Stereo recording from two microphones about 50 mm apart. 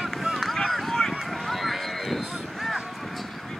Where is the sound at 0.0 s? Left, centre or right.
Centre.